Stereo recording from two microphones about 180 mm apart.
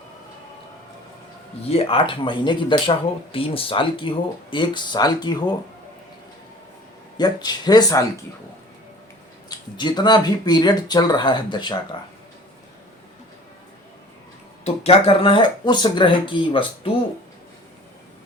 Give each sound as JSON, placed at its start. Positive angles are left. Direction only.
{"t": 1.7, "sound": "speech", "side_deg": 30}
{"t": 7.2, "sound": "speech", "side_deg": 25}
{"t": 9.5, "sound": "speech", "side_deg": 25}
{"t": 14.6, "sound": "speech", "side_deg": 35}